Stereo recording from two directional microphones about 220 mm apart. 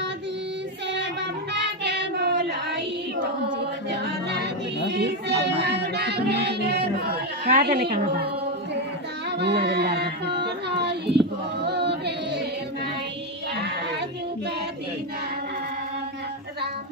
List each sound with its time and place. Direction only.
1.5 s child singing: 50° right (ahead or behind)
3.9 s music: 50° right (ahead or behind)
9.4 s music: 50° right (ahead or behind)
10.4 s child singing: 50° right (ahead or behind)
11.6 s a sound: 50° right (ahead or behind)